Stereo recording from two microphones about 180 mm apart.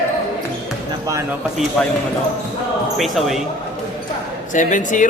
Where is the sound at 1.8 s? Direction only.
5° left (ahead or behind).